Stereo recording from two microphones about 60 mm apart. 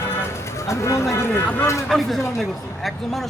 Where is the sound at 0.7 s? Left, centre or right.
Left.